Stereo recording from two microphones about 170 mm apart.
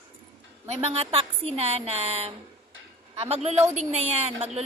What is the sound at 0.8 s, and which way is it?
A woman's voice, 35° right (ahead or behind).